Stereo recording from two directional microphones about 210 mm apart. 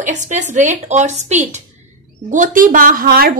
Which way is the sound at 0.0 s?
35° right (ahead or behind).